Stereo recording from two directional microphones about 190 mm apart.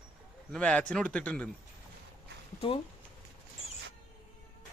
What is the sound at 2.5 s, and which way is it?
Speech, 30° left (ahead or behind).